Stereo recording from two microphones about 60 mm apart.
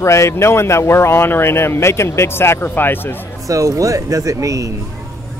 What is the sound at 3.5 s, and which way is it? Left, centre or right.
Speech, right.